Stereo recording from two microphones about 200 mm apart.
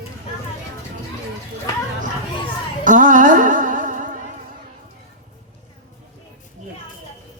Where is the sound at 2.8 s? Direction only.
40° right (ahead or behind).